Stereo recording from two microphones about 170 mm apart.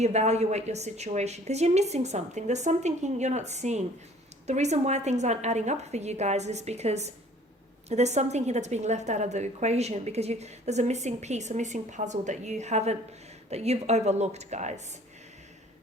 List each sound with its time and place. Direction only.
0.0 s a woman's voice: 40° right (ahead or behind)